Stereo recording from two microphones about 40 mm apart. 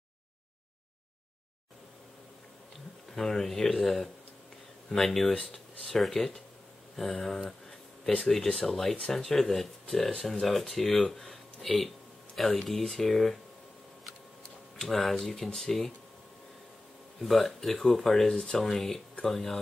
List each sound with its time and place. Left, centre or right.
3.1 s speech: centre
14.8 s speech: centre
17.2 s speech: centre
18.3 s speech: left
18.6 s speech: centre